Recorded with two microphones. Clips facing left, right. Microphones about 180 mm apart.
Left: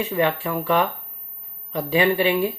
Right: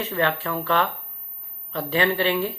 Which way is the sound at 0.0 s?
10° left (ahead or behind).